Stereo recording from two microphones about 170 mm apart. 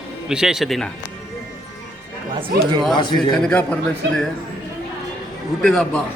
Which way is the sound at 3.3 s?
5° left (ahead or behind).